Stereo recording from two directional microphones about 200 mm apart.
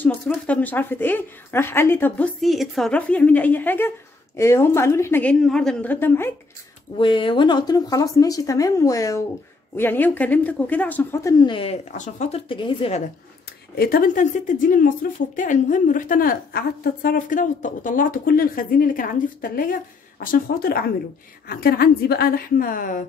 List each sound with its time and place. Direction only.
0.0 s speech: 5° left (ahead or behind)
7.0 s speech: 25° left (ahead or behind)
13.7 s a woman's voice: 45° left (ahead or behind)